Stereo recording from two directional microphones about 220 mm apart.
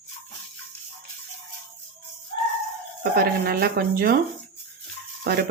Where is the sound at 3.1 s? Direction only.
40° right (ahead or behind).